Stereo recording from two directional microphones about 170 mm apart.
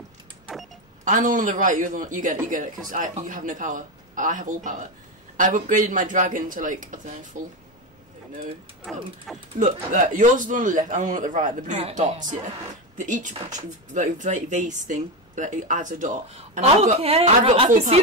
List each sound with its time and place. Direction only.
1.0 s speech: 50° right (ahead or behind)
9.3 s speech: centre (ahead or behind)
9.6 s speech: 50° right (ahead or behind); by 17.6 s 35° right (ahead or behind)